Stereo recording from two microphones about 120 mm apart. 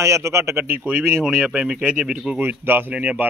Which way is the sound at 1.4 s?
10° right (ahead or behind).